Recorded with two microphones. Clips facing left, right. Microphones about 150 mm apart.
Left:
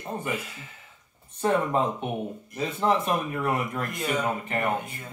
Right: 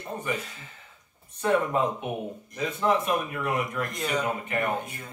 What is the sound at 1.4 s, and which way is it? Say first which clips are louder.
Speech: even; 30° left (ahead or behind).